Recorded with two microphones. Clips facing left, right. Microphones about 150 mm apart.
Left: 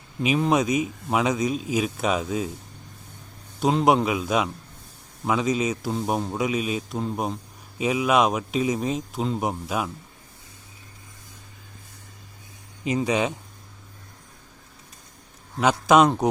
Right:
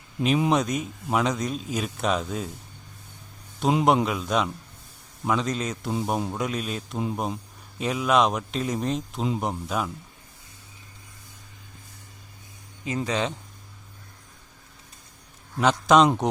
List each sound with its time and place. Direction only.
0.5 s speech: 5° left (ahead or behind)
3.6 s speech: centre (ahead or behind)
13.0 s speech: 10° left (ahead or behind)
15.6 s speech: 5° left (ahead or behind)